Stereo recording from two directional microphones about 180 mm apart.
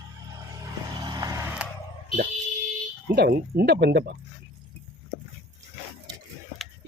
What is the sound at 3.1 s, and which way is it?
Speech, 60° right (ahead or behind).